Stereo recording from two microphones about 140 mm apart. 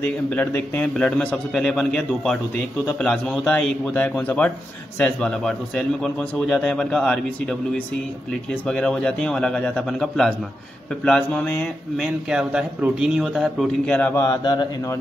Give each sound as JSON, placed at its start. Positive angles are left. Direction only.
{"t": 0.0, "sound": "a man's voice", "side_deg": 10}
{"t": 8.6, "sound": "a man's voice", "side_deg": 5}
{"t": 12.0, "sound": "a man's voice", "side_deg": -5}
{"t": 14.1, "sound": "a man's voice", "side_deg": 20}
{"t": 14.4, "sound": "a man's voice", "side_deg": 30}